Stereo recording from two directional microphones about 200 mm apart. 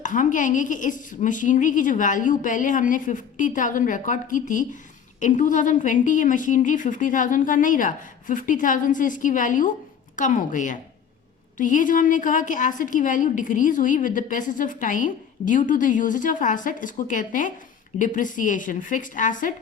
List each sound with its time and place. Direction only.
0.0 s a woman's voice: 40° left (ahead or behind)